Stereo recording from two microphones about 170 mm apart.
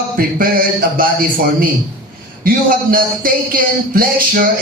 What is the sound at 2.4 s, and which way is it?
A man's voice, 55° right (ahead or behind).